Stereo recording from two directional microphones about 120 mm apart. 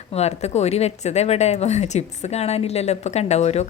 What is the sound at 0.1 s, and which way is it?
Speech, 65° left (ahead or behind).